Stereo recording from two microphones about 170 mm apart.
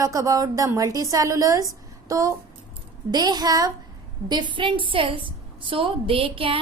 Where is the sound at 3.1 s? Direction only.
25° right (ahead or behind).